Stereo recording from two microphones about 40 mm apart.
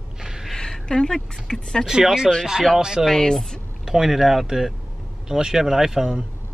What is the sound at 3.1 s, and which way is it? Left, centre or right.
Speech, centre.